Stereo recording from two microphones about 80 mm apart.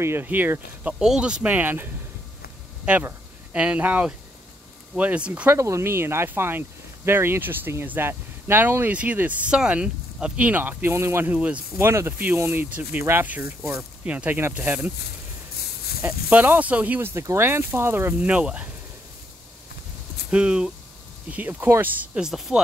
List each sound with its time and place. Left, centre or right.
0.0 s speech: right
0.9 s speech: centre
5.5 s speech: right
11.3 s speech: centre
11.8 s speech: right
12.1 s speech: right
16.3 s speech: centre
17.1 s speech: right
17.4 s speech: right
18.2 s speech: centre
20.2 s speech: centre
21.3 s speech: right
22.1 s speech: centre